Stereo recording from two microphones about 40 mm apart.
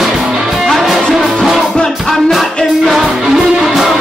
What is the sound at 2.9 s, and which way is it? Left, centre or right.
Music, centre.